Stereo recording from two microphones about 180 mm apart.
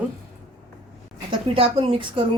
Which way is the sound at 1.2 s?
30° right (ahead or behind).